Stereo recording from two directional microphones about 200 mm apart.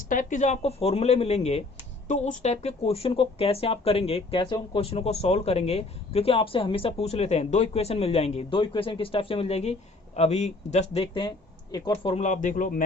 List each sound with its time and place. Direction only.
0.1 s speech: 40° left (ahead or behind); by 11.8 s 25° left (ahead or behind)
12.0 s speech: 35° left (ahead or behind)